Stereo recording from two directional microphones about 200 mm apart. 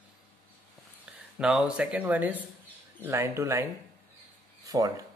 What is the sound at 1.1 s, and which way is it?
Speech, 5° right (ahead or behind).